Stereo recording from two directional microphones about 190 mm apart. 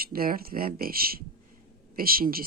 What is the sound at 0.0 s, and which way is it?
Speech, 50° right (ahead or behind).